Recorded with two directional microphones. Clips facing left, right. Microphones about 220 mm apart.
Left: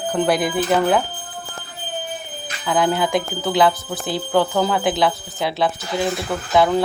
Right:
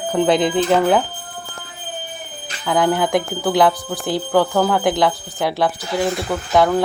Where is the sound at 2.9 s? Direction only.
15° right (ahead or behind).